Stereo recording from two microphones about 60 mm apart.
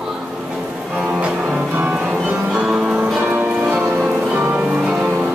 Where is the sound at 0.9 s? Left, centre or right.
Centre.